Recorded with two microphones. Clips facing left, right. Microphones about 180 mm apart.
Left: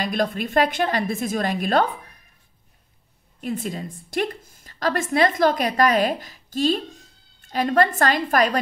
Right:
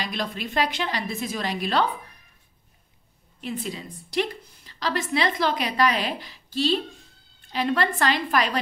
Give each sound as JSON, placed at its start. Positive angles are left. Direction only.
{"t": 0.0, "sound": "a woman's voice", "side_deg": 50}
{"t": 3.3, "sound": "a woman's voice", "side_deg": 45}